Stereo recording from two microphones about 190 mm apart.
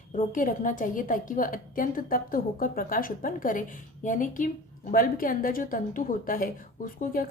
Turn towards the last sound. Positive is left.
turn(degrees=50)  # may be behind; listen again after turning